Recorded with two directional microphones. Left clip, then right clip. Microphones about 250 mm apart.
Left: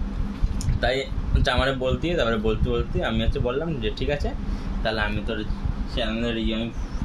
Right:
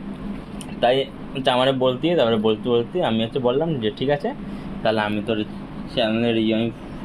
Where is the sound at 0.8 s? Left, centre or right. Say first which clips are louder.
Right 6 dB; centre.